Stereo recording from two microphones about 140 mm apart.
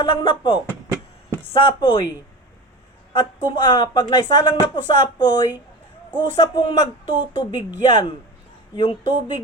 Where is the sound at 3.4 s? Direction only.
35° left (ahead or behind).